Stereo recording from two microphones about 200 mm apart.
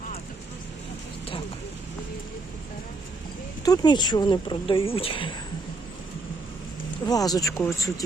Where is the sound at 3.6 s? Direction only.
20° left (ahead or behind).